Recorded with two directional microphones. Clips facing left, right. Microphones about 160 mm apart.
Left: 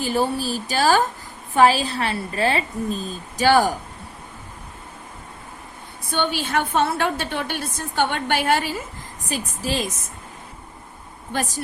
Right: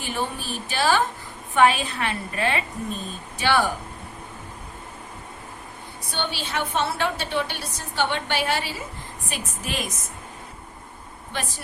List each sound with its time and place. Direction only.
0.0 s a woman's voice: 35° left (ahead or behind)
6.1 s a woman's voice: 50° left (ahead or behind)
9.3 s a woman's voice: 35° left (ahead or behind)
11.3 s a woman's voice: 45° left (ahead or behind)